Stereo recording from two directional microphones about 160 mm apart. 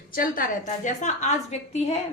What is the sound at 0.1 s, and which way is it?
A woman's voice, 60° left (ahead or behind).